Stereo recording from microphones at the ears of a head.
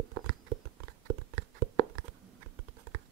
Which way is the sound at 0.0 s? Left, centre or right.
Right.